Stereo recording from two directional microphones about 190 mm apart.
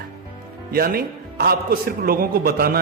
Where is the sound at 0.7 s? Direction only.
50° right (ahead or behind).